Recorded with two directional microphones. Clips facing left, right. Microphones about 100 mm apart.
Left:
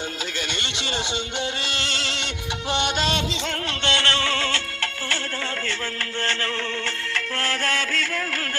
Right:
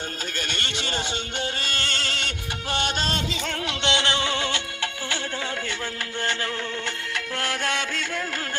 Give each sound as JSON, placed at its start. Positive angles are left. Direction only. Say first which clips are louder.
{"t": 0.3, "sound": "a sound", "louder": "left 1 dB", "side_deg": -45}
{"t": 1.4, "sound": "music", "louder": "left 1 dB", "side_deg": -45}
{"t": 3.7, "sound": "music", "louder": "right 1 dB", "side_deg": -15}
{"t": 7.1, "sound": "music", "louder": "left 2 dB", "side_deg": -15}